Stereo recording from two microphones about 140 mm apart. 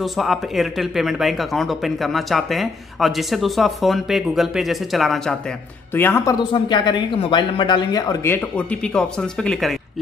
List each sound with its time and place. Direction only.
0.0 s speech: centre (ahead or behind)
5.9 s speech: 15° left (ahead or behind)
6.5 s a man's voice: 30° left (ahead or behind)
8.3 s speech: 10° left (ahead or behind)